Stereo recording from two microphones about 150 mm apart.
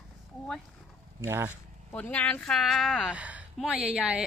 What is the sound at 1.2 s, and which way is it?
Speech, 15° right (ahead or behind).